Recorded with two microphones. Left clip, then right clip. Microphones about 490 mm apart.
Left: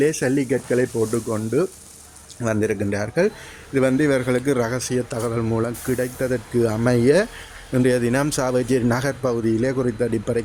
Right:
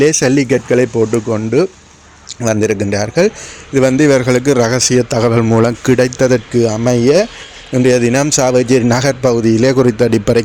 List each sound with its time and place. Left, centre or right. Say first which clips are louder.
0.0 s a man's voice: right 9 dB; left